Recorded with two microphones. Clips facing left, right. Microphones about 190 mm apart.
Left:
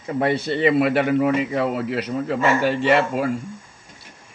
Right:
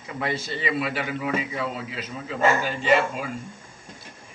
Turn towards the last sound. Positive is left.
turn(degrees=65)  # may be behind; listen again after turning